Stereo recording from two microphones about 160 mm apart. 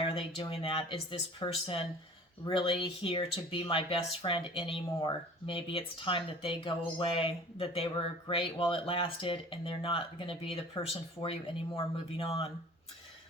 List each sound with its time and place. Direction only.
0.0 s speech: 35° left (ahead or behind)